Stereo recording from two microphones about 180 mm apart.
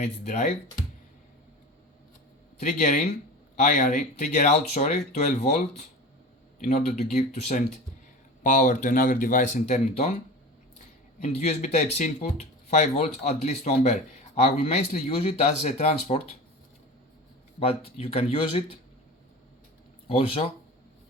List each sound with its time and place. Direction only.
0.0 s speech: 40° left (ahead or behind)
2.6 s speech: 40° left (ahead or behind)
11.2 s speech: 35° left (ahead or behind)
17.6 s speech: 35° left (ahead or behind)
20.1 s speech: 30° left (ahead or behind)